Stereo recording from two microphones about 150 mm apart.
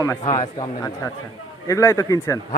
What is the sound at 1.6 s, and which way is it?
Speech, 20° left (ahead or behind).